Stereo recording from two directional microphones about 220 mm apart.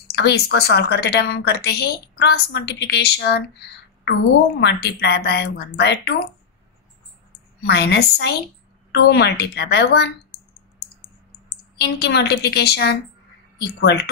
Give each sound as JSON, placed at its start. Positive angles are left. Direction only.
{"t": 0.1, "sound": "a woman's voice", "side_deg": 50}
{"t": 4.6, "sound": "a woman's voice", "side_deg": 50}
{"t": 7.6, "sound": "a woman's voice", "side_deg": 50}
{"t": 11.4, "sound": "a woman's voice", "side_deg": 50}